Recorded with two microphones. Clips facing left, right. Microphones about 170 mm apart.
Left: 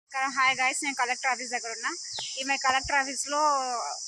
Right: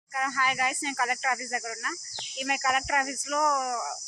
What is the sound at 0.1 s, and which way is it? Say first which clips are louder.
Speech: right 1 dB; 5° left (ahead or behind).